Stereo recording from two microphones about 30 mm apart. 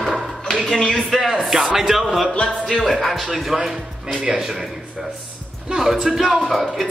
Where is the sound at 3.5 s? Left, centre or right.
Centre.